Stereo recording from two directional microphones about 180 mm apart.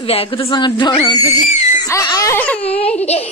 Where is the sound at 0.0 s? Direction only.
35° left (ahead or behind).